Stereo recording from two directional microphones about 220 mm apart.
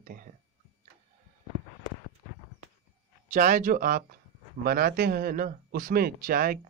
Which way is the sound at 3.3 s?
35° right (ahead or behind).